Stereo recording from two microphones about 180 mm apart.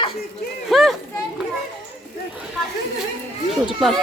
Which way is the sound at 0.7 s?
Centre (ahead or behind).